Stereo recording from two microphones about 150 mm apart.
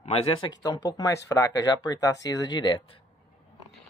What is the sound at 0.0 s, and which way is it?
Speech, 40° left (ahead or behind).